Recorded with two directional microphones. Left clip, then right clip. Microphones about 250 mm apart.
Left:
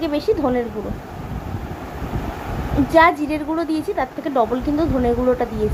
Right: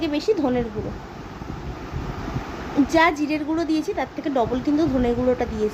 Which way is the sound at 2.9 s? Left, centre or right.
Centre.